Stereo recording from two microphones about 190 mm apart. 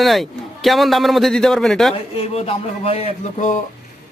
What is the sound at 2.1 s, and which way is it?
Speech, 30° left (ahead or behind).